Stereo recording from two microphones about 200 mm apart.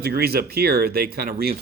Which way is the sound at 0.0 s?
50° right (ahead or behind).